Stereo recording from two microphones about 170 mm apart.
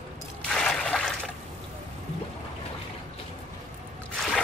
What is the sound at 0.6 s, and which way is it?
Trickle, 5° left (ahead or behind).